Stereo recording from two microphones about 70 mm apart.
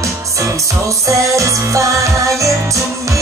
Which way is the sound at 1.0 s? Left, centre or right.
Right.